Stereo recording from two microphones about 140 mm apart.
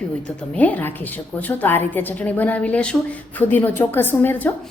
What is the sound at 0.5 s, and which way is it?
A woman's voice, 10° left (ahead or behind).